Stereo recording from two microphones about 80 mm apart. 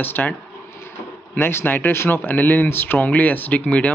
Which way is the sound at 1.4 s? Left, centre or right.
Left.